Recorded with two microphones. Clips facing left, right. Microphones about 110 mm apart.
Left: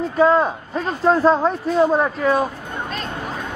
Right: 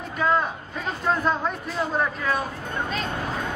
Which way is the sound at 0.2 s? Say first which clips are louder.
Left 7 dB; 30° left (ahead or behind).